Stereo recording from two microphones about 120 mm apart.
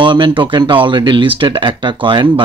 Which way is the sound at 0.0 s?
40° right (ahead or behind).